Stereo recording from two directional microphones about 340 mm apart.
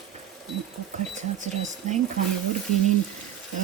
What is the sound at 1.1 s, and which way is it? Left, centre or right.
Speech, right.